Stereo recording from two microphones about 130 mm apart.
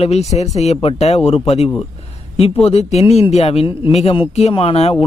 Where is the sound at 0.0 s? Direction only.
55° left (ahead or behind).